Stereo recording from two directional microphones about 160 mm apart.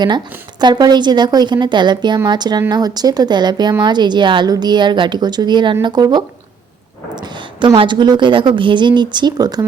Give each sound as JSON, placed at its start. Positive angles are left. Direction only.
{"t": 0.6, "sound": "a woman's voice", "side_deg": -25}